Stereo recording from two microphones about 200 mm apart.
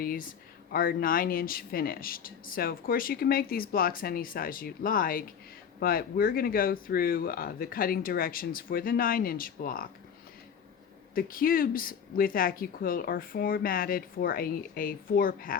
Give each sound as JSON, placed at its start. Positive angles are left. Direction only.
{"t": 0.0, "sound": "speech", "side_deg": 45}
{"t": 11.1, "sound": "speech", "side_deg": 45}